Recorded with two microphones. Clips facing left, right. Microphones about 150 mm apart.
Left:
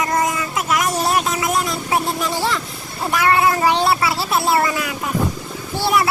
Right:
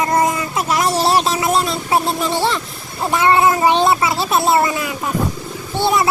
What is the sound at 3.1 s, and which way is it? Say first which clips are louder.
Speech: right 3 dB; 25° right (ahead or behind).